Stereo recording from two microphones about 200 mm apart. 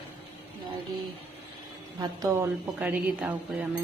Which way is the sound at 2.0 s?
20° right (ahead or behind).